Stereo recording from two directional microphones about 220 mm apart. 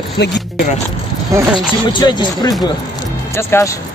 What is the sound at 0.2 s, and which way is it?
Speech, 50° left (ahead or behind).